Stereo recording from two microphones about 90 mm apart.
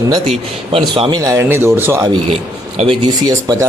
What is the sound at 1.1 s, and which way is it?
Speech, 40° right (ahead or behind).